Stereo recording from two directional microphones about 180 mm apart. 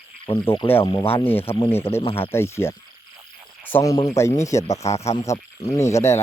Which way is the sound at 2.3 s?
15° left (ahead or behind).